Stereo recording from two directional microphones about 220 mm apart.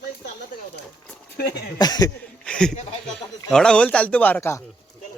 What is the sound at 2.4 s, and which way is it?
Speech, 5° left (ahead or behind).